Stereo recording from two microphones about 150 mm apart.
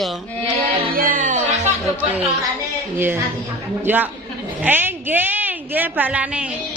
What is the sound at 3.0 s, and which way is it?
A woman's voice, 15° right (ahead or behind).